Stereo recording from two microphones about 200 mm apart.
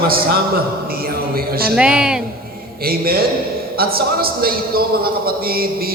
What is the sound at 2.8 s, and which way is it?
A man's voice, 50° right (ahead or behind).